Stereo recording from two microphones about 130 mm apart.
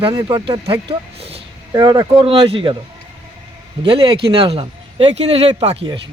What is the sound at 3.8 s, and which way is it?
Speech, 40° right (ahead or behind).